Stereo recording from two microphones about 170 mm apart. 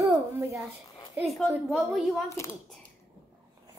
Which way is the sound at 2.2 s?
15° left (ahead or behind).